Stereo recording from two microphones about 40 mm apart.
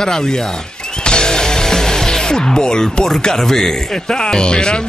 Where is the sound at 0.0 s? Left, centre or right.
Centre.